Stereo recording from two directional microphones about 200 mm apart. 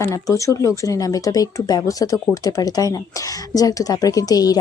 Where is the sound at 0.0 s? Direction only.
15° left (ahead or behind).